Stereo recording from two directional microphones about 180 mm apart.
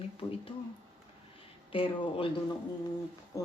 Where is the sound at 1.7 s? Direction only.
30° left (ahead or behind).